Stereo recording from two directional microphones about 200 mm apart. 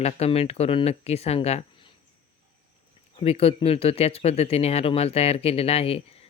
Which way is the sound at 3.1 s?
30° left (ahead or behind).